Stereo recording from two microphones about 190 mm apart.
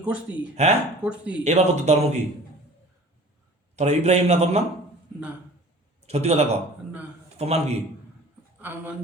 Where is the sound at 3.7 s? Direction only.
35° right (ahead or behind).